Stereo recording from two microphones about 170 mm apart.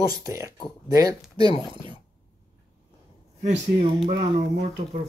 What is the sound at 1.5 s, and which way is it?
Speech, 30° left (ahead or behind).